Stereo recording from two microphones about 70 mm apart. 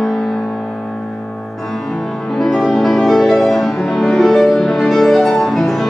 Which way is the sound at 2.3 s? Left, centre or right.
Centre.